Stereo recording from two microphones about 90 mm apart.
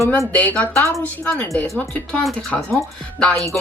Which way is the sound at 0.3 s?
15° left (ahead or behind).